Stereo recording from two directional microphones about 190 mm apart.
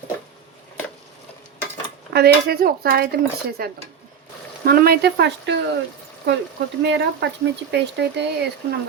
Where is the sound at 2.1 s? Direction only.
55° right (ahead or behind).